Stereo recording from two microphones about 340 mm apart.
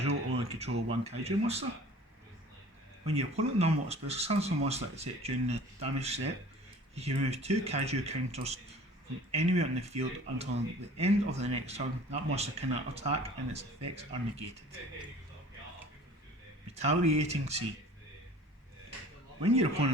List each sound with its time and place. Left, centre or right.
0.0 s speech: centre
3.2 s speech: centre
16.7 s speech: centre
19.4 s speech: centre